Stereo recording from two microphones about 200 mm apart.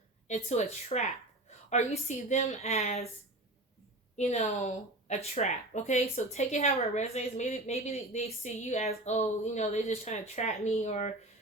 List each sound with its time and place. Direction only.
0.3 s speech: 35° left (ahead or behind)
4.2 s speech: 30° left (ahead or behind)